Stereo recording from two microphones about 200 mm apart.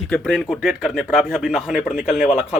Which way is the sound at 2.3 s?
5° right (ahead or behind).